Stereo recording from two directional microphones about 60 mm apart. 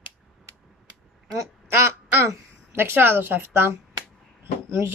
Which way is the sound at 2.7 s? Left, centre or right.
Right.